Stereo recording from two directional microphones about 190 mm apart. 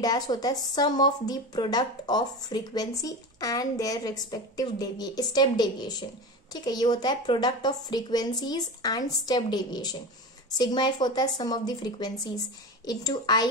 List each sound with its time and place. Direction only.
0.0 s speech: 20° left (ahead or behind)